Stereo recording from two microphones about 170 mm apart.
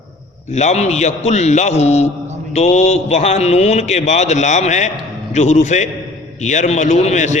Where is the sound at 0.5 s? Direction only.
40° left (ahead or behind).